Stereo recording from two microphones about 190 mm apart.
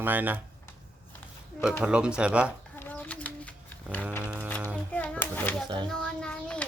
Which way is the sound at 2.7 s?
10° left (ahead or behind).